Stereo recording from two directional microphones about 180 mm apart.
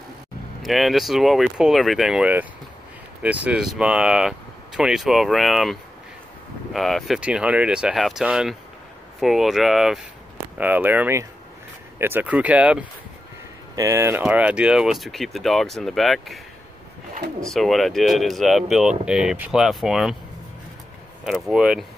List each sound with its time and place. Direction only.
0.6 s speech: centre (ahead or behind)
17.5 s speech: centre (ahead or behind)
21.3 s speech: 5° right (ahead or behind)